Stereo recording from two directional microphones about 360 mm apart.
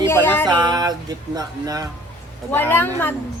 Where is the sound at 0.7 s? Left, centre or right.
Centre.